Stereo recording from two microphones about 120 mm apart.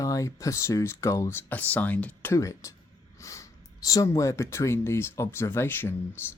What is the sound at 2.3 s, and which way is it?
Speech, 25° left (ahead or behind).